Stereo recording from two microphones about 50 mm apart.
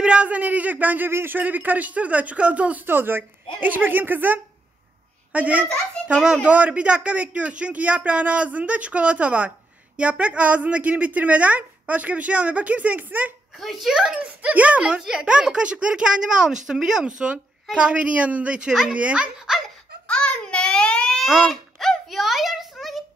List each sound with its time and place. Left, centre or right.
0.0 s a man's voice: right
2.9 s a woman's voice: right
13.6 s a child's voice: centre
13.9 s a woman's voice: centre
14.4 s a child's voice: right
20.1 s babbling: centre
21.5 s a sound: centre